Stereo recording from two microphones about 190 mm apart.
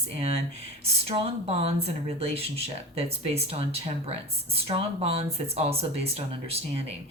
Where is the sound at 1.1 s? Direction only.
30° right (ahead or behind).